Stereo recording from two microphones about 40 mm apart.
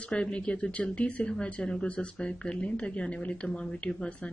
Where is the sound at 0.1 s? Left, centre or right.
Left.